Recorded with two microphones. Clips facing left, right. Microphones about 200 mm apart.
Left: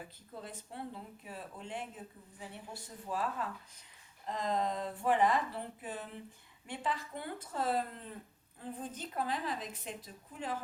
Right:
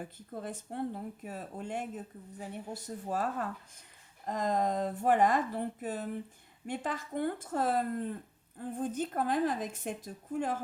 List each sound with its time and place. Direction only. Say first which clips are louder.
0.0 s a woman's voice: right 7 dB; 50° right (ahead or behind)